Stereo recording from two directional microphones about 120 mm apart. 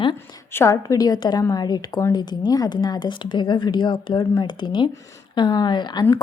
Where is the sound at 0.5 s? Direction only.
25° left (ahead or behind).